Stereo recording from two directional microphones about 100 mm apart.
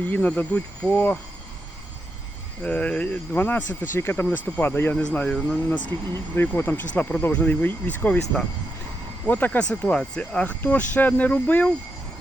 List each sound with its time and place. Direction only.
0.1 s speech: 15° left (ahead or behind)
2.6 s speech: 10° left (ahead or behind)
6.3 s speech: 20° left (ahead or behind)